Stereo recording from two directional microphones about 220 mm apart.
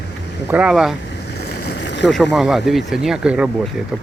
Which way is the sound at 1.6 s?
50° left (ahead or behind).